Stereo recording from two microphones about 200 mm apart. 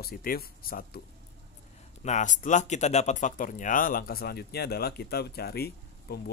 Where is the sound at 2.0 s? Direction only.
35° left (ahead or behind).